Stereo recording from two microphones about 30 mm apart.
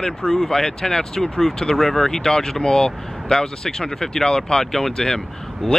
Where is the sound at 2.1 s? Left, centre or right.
Centre.